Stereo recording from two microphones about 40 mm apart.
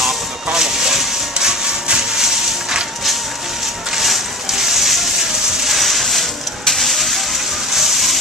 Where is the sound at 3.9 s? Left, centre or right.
Centre.